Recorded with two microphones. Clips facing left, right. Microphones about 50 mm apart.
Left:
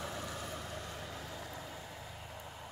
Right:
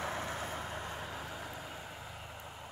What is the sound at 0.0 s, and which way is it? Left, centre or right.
Vehicle, right.